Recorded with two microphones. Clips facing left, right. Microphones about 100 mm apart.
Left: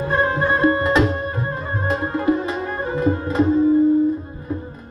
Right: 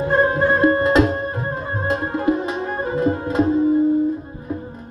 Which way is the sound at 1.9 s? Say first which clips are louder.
Even; 20° right (ahead or behind).